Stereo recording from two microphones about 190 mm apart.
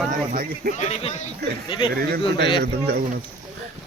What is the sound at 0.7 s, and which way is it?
Speech, 35° left (ahead or behind).